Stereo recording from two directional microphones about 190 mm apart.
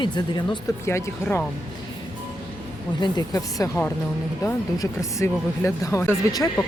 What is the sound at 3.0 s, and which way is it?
Speech, 20° left (ahead or behind).